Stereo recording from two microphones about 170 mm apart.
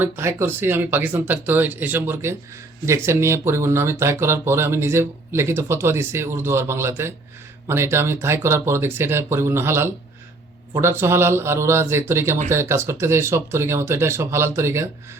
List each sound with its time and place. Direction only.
0.0 s speech: 15° right (ahead or behind)